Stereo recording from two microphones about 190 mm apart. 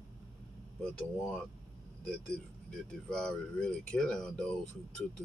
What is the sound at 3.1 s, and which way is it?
Speech, 5° left (ahead or behind).